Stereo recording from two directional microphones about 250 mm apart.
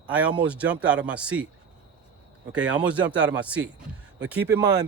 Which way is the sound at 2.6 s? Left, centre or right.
Centre.